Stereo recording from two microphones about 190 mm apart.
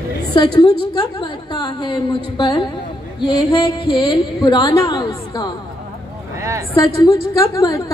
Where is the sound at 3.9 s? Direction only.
20° left (ahead or behind).